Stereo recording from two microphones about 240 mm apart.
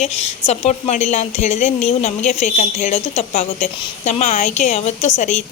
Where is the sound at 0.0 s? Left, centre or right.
Left.